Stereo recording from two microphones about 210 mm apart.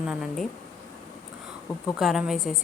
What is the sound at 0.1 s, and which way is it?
Speech, 5° right (ahead or behind).